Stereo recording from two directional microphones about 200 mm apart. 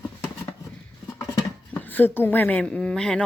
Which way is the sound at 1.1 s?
15° left (ahead or behind).